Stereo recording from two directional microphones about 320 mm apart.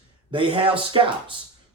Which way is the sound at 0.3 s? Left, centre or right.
Centre.